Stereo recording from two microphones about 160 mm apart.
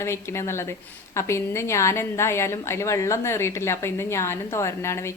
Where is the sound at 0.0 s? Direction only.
15° left (ahead or behind).